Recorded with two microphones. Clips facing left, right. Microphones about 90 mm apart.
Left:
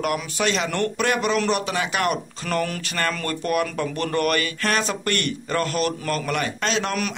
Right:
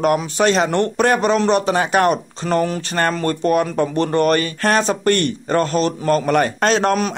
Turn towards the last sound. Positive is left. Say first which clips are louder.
# right 8 dB
turn(degrees=-45)  # may be behind; listen again after turning